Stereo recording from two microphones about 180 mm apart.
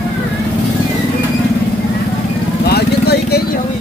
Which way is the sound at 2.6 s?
60° left (ahead or behind).